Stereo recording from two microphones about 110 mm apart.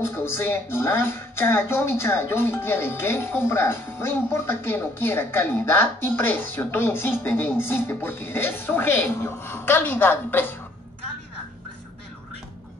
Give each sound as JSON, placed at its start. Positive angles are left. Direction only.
{"t": 0.0, "sound": "speech", "side_deg": 20}